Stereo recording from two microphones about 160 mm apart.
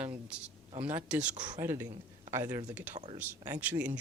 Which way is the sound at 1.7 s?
15° right (ahead or behind).